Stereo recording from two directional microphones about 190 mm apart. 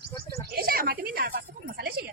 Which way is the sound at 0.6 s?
50° right (ahead or behind).